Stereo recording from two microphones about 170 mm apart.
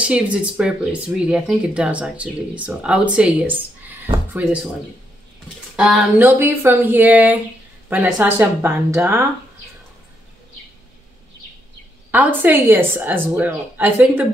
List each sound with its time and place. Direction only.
0.0 s speech: 5° right (ahead or behind)
5.8 s speech: centre (ahead or behind)
6.1 s speech: 10° right (ahead or behind)
12.1 s speech: 10° right (ahead or behind)